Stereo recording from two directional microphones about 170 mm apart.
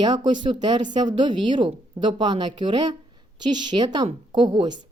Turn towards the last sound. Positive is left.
turn(degrees=-25)  # may be behind; listen again after turning